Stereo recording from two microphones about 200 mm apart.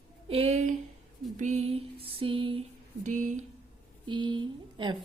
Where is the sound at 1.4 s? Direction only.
35° right (ahead or behind).